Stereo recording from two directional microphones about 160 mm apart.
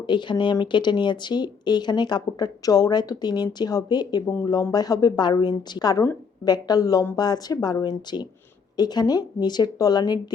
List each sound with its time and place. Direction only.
0.1 s speech: 30° left (ahead or behind)